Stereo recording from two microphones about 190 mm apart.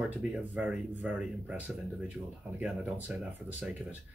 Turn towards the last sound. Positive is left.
turn(degrees=-10)  # may be behind; listen again after turning